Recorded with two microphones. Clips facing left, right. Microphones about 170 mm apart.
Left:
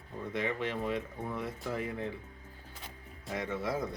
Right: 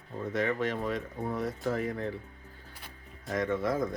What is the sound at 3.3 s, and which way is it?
Speech, 50° right (ahead or behind).